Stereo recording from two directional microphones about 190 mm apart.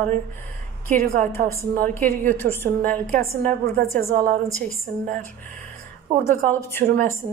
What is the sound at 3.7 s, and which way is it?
Speech, 45° right (ahead or behind).